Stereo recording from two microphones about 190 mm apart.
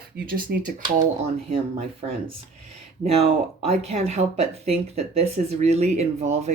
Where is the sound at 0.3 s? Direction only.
45° right (ahead or behind).